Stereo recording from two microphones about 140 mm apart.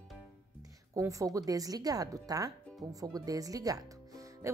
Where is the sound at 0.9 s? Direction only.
25° right (ahead or behind).